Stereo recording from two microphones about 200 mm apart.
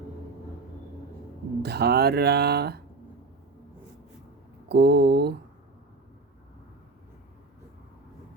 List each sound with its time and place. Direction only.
1.6 s speech: 55° right (ahead or behind)
4.7 s mantra: 55° right (ahead or behind)